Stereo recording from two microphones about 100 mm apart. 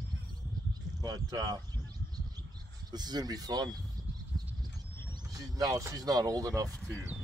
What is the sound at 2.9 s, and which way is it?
Speech, 45° right (ahead or behind).